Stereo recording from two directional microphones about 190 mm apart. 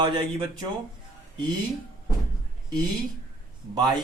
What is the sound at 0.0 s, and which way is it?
Speech, 25° right (ahead or behind).